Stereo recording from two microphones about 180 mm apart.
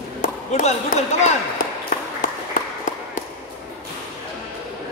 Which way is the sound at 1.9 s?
50° left (ahead or behind).